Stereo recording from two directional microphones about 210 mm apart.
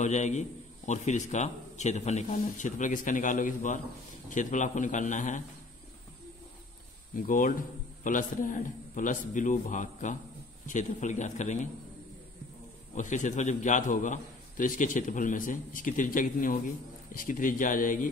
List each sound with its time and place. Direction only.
0.0 s a man's voice: 35° left (ahead or behind)
7.2 s a man's voice: 40° left (ahead or behind)
12.9 s a man's voice: 35° left (ahead or behind)